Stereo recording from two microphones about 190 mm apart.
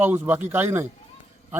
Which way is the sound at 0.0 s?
10° right (ahead or behind).